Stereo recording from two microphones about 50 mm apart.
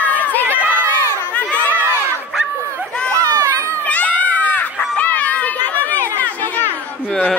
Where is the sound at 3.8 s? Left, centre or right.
Left.